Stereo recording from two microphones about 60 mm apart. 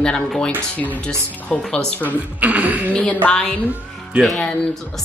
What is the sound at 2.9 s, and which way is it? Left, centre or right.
Speech, left.